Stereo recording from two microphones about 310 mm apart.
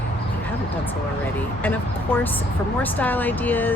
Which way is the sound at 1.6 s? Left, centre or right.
Centre.